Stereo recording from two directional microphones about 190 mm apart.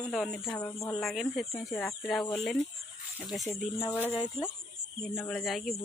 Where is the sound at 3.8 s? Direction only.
10° left (ahead or behind).